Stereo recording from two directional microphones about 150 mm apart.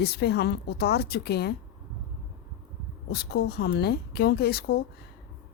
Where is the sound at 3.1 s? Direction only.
90° left.